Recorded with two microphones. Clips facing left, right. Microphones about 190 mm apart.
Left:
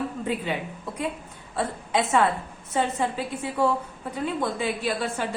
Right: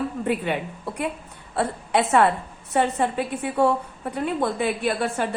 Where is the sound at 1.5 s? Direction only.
65° right (ahead or behind).